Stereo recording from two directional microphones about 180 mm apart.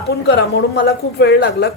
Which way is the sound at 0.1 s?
65° left (ahead or behind).